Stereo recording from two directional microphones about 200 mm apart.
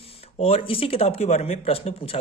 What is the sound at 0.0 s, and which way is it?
Speech, 30° left (ahead or behind).